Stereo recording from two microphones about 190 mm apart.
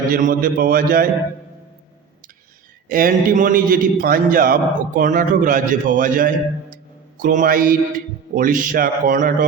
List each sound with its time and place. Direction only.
0.1 s a man's voice: 45° right (ahead or behind)
2.9 s a man's voice: 50° right (ahead or behind)